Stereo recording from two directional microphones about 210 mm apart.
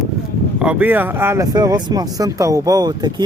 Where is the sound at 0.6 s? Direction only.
5° right (ahead or behind).